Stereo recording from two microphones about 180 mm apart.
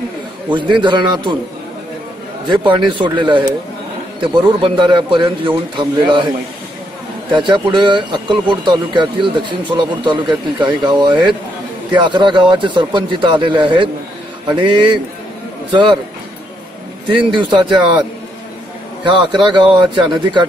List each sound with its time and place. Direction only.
0.6 s speech: 25° right (ahead or behind)
2.4 s speech: 25° right (ahead or behind)
7.3 s speech: 25° right (ahead or behind)
17.1 s speech: 25° right (ahead or behind)
19.0 s speech: 25° right (ahead or behind)